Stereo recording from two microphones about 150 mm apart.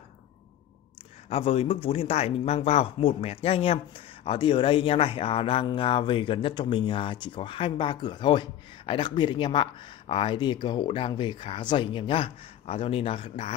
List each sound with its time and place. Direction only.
1.3 s speech: 40° left (ahead or behind)